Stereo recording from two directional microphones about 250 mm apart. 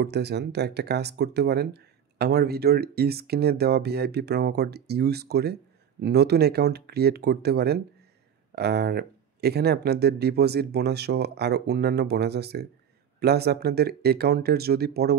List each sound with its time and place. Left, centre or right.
0.0 s speech: right